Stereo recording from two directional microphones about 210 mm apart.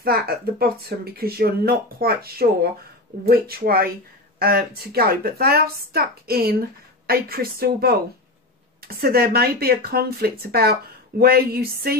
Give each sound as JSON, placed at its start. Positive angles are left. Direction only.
{"t": 0.0, "sound": "speech", "side_deg": -45}